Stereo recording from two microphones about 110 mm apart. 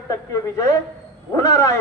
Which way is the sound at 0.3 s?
30° left (ahead or behind).